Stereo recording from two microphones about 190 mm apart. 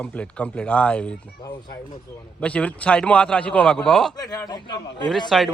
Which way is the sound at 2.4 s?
5° left (ahead or behind).